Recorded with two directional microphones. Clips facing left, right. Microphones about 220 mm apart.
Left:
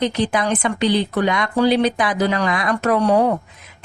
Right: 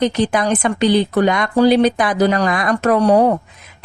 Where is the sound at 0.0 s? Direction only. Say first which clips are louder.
Right 3 dB; 45° right (ahead or behind).